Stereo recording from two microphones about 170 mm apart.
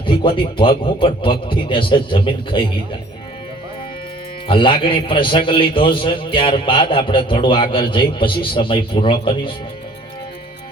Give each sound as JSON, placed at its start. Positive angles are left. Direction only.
{"t": 0.0, "sound": "a man's voice", "side_deg": 30}
{"t": 4.4, "sound": "a man's voice", "side_deg": 30}